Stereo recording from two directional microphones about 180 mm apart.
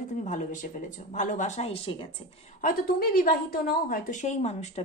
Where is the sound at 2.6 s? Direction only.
50° left (ahead or behind).